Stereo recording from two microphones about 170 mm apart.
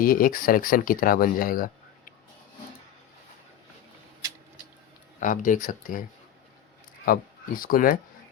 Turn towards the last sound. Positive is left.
turn(degrees=55)  # may be behind; listen again after turning